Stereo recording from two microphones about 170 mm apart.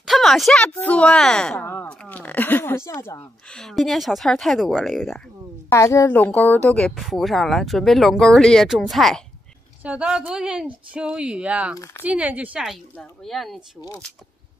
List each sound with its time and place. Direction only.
0.0 s a sound: centre (ahead or behind)
0.7 s speech: 5° left (ahead or behind)
3.5 s speech: centre (ahead or behind)
5.7 s speech: 15° left (ahead or behind); by 12.7 s 5° right (ahead or behind)
12.9 s speech: 5° left (ahead or behind)
13.7 s speech: 20° left (ahead or behind)